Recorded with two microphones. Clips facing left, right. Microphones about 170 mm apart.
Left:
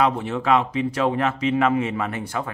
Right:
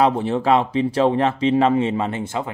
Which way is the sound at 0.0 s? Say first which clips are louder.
Right 4 dB; 30° right (ahead or behind).